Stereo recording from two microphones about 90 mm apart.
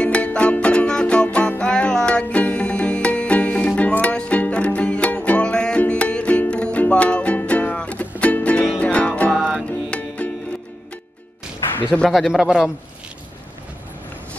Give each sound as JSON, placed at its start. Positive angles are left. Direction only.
{"t": 0.0, "sound": "music", "side_deg": 15}
{"t": 12.1, "sound": "a man's voice", "side_deg": 0}